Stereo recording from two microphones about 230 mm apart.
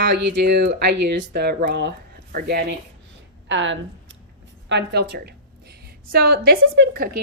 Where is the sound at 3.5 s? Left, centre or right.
Right.